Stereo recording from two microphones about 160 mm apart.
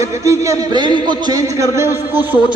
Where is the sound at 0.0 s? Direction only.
20° right (ahead or behind).